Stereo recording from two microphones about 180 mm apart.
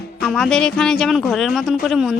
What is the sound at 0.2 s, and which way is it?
A woman's voice, centre (ahead or behind).